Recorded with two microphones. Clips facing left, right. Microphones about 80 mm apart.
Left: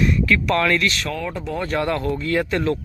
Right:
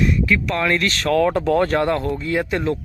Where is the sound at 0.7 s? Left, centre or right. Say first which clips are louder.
Right 1 dB; right.